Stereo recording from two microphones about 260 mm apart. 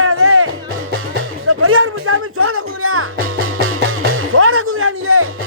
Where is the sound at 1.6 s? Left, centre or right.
Right.